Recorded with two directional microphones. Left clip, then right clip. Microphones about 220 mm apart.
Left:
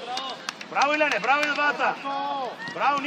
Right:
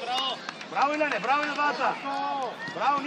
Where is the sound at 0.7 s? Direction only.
25° left (ahead or behind).